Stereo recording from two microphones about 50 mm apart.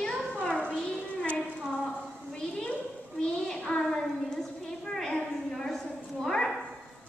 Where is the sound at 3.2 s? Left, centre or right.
Centre.